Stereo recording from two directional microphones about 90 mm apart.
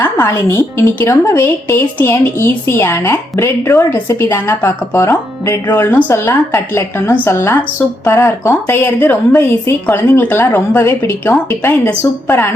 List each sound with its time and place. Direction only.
0.0 s speech: 30° left (ahead or behind)